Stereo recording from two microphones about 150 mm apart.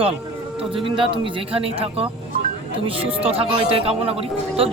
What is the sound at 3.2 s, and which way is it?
Speech, 40° right (ahead or behind).